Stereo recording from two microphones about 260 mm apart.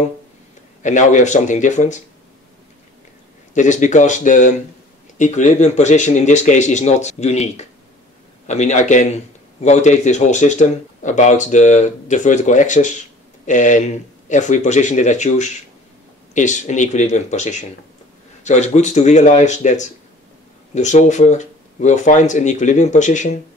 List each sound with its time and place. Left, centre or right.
0.8 s speech: left
3.5 s speech: left